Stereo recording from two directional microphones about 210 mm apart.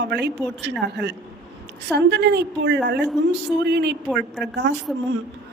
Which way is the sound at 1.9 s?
55° right (ahead or behind).